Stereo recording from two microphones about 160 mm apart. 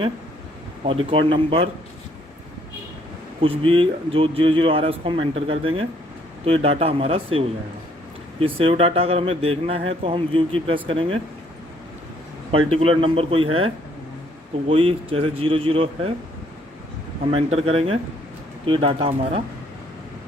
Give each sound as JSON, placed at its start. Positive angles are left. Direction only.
{"t": 0.9, "sound": "speech", "side_deg": -35}
{"t": 3.4, "sound": "speech", "side_deg": -35}
{"t": 12.5, "sound": "speech", "side_deg": -35}
{"t": 14.7, "sound": "speech", "side_deg": -35}
{"t": 17.3, "sound": "speech", "side_deg": -40}